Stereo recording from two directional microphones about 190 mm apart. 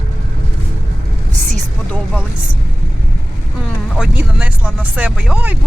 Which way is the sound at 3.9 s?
5° right (ahead or behind).